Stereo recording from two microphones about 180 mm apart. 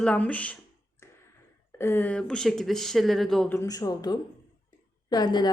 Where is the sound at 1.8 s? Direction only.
10° left (ahead or behind).